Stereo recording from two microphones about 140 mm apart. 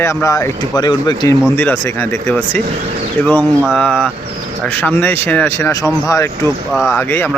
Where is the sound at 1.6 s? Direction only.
15° left (ahead or behind).